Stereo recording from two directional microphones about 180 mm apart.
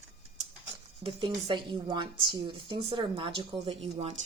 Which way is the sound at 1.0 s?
25° right (ahead or behind).